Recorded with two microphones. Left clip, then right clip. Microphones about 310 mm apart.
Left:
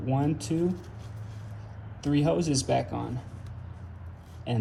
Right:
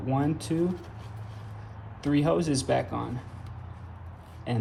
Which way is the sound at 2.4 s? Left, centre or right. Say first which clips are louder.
Even; centre.